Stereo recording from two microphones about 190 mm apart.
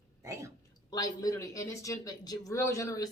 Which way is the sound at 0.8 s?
20° left (ahead or behind).